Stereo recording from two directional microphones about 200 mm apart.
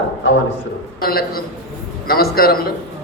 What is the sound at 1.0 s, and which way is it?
A man's voice, 50° left (ahead or behind).